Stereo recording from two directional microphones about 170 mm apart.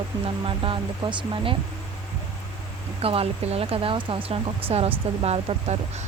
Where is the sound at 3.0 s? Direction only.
35° right (ahead or behind).